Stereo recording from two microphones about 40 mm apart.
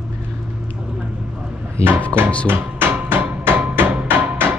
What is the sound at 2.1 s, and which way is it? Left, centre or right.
Speech, left.